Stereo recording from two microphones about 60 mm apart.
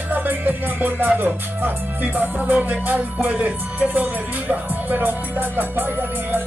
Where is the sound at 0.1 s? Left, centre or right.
Right.